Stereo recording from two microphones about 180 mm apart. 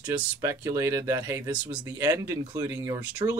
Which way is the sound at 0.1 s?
15° right (ahead or behind).